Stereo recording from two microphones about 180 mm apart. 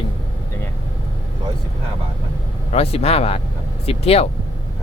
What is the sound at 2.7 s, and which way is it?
Speech, 35° left (ahead or behind).